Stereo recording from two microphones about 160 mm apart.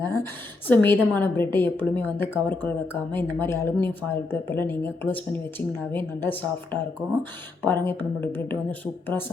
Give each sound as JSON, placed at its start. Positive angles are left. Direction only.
{"t": 0.0, "sound": "speech", "side_deg": 15}